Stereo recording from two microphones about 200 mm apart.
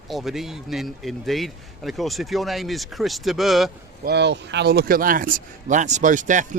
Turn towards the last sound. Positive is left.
turn(degrees=-40)  # may be behind; listen again after turning